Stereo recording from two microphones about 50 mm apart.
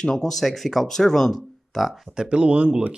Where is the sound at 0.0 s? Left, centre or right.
Centre.